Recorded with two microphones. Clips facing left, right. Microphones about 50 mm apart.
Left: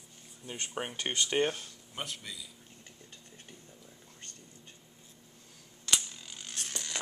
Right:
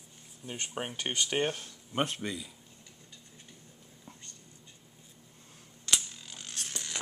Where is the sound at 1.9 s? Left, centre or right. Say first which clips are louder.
Right 9 dB; right.